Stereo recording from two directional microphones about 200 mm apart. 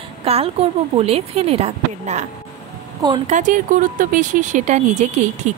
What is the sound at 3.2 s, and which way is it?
A woman's voice, 40° right (ahead or behind).